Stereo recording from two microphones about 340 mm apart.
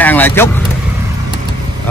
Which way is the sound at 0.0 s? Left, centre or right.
Centre.